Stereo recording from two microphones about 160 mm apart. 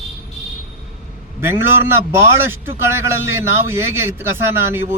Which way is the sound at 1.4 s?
15° right (ahead or behind).